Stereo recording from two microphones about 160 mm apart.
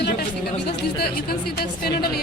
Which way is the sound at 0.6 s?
75° left (ahead or behind).